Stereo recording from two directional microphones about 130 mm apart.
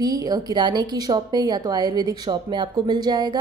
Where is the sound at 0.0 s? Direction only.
30° right (ahead or behind).